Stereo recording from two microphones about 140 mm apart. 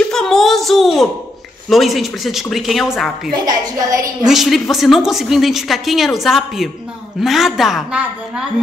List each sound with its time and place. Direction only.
0.1 s a sound: 5° left (ahead or behind)
1.7 s a woman's voice: centre (ahead or behind)
3.3 s a woman's voice: 30° right (ahead or behind)
4.2 s a woman's voice: centre (ahead or behind)